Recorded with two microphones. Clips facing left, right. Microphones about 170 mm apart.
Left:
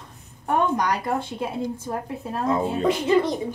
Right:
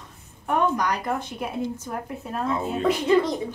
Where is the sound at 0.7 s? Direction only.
25° left (ahead or behind).